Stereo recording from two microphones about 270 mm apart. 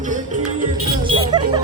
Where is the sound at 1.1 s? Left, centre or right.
Centre.